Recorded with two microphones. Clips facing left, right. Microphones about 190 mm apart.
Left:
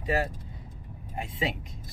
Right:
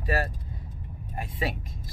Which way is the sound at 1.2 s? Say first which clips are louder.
Even; 25° left (ahead or behind).